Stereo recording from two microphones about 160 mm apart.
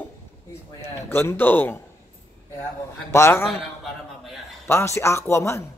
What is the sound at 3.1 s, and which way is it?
Speech, 15° left (ahead or behind).